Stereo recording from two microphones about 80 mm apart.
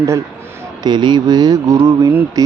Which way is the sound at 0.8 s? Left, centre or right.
Right.